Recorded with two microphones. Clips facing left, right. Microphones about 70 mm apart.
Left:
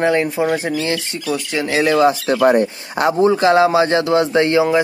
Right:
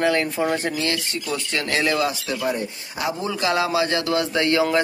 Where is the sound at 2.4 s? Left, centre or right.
Left.